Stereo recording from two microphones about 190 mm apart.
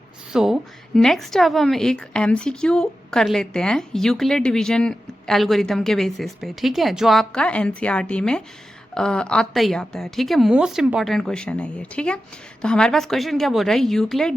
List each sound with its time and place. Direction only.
0.3 s a woman's voice: centre (ahead or behind)